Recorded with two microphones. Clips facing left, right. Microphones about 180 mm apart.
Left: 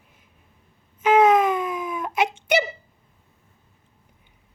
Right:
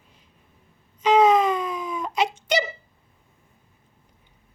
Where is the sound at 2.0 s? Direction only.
5° left (ahead or behind).